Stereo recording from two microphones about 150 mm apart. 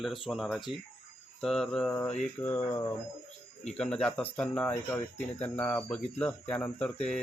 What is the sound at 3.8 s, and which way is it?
Speech, 5° left (ahead or behind).